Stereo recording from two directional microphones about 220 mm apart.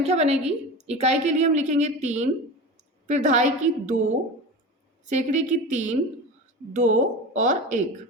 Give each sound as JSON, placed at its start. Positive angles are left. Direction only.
{"t": 0.0, "sound": "a woman's voice", "side_deg": -30}
{"t": 5.0, "sound": "a woman's voice", "side_deg": -35}